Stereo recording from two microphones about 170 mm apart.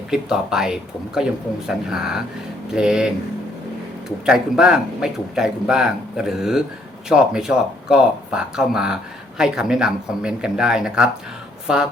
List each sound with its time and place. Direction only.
0.1 s speech: 5° right (ahead or behind)
4.3 s speech: 5° right (ahead or behind)